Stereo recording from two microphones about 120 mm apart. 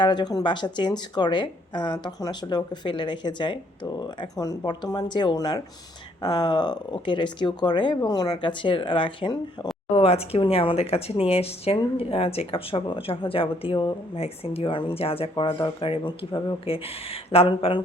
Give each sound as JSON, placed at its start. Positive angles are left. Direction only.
{"t": 0.0, "sound": "speech", "side_deg": 40}
{"t": 9.9, "sound": "speech", "side_deg": 55}
{"t": 14.2, "sound": "speech", "side_deg": 50}